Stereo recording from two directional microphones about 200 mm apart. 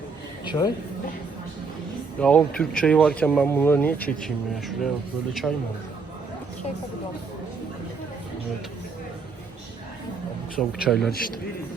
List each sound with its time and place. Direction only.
0.4 s a woman's voice: 20° left (ahead or behind)
2.1 s speech: 5° left (ahead or behind)
10.6 s speech: centre (ahead or behind)